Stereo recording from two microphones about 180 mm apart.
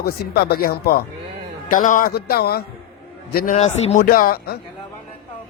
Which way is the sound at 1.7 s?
45° left (ahead or behind).